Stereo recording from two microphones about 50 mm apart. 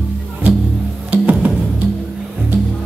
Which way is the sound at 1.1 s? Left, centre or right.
Right.